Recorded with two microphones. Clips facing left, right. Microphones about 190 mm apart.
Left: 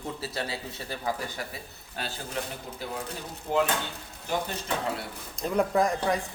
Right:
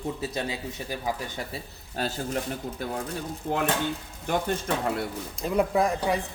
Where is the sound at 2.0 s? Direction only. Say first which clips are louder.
Right 6 dB; 40° right (ahead or behind).